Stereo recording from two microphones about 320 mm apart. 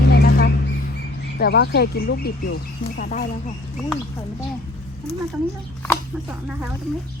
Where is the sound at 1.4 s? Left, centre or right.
Left.